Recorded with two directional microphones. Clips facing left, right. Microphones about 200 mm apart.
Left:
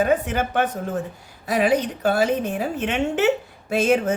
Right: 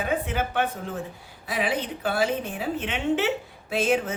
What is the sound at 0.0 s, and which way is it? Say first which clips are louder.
A woman's voice: left 6 dB; 45° left (ahead or behind).